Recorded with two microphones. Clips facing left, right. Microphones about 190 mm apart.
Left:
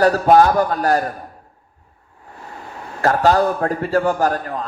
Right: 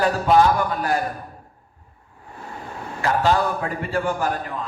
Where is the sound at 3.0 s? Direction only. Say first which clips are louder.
Left 5 dB; 45° left (ahead or behind).